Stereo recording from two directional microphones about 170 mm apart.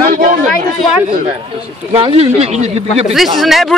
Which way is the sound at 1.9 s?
35° right (ahead or behind).